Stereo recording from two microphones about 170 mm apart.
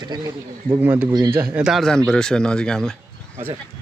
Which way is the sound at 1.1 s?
25° right (ahead or behind).